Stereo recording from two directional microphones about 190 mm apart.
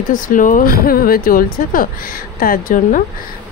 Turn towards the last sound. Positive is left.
turn(degrees=45)  # may be behind; listen again after turning